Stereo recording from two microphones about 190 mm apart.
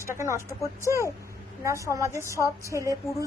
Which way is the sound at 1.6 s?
15° right (ahead or behind).